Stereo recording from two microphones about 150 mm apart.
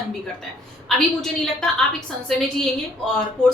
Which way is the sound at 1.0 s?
5° left (ahead or behind).